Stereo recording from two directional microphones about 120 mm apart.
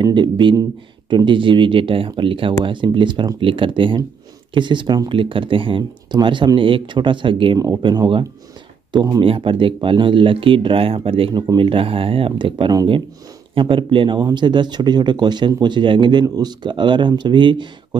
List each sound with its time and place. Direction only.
0.0 s speech: 40° right (ahead or behind)
7.5 s speech: 30° right (ahead or behind)
9.2 s speech: 45° right (ahead or behind)